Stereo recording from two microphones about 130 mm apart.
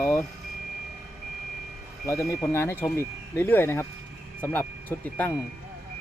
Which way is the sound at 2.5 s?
20° left (ahead or behind).